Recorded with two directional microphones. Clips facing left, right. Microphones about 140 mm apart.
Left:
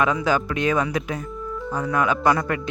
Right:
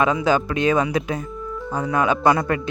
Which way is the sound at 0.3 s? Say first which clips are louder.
Right 3 dB; 25° right (ahead or behind).